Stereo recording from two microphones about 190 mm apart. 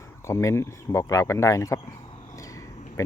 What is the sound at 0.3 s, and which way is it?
Speech, 15° left (ahead or behind).